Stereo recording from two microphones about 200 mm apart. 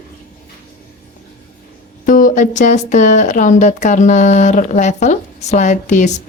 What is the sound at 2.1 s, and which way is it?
Speech, 45° left (ahead or behind).